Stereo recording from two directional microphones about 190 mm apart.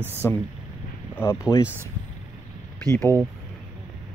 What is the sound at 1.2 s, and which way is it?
Speech, 15° left (ahead or behind).